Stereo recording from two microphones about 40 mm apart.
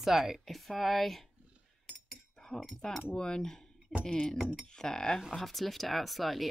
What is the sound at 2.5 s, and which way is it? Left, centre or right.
Speech, centre.